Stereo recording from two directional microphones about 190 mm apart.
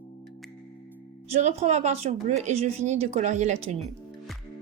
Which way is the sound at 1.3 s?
35° right (ahead or behind).